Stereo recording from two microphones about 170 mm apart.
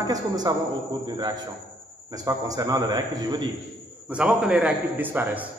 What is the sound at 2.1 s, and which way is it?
Speech, 20° right (ahead or behind).